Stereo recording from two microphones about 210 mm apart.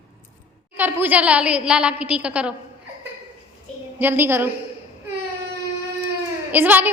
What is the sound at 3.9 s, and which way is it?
Speech, 10° right (ahead or behind).